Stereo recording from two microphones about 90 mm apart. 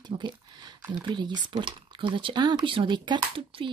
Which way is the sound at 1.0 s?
55° right (ahead or behind).